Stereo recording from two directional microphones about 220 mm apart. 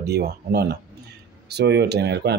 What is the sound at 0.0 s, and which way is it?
Speech, 45° right (ahead or behind).